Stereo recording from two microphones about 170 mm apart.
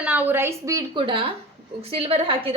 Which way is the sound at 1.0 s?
30° right (ahead or behind).